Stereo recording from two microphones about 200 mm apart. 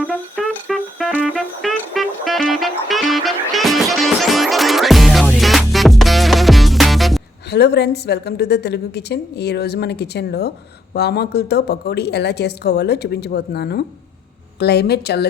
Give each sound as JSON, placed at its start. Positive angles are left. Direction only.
{"t": 0.3, "sound": "music", "side_deg": 0}
{"t": 7.5, "sound": "a woman's voice", "side_deg": 55}